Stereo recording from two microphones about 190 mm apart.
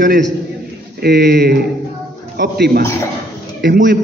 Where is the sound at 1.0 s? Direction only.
60° right (ahead or behind).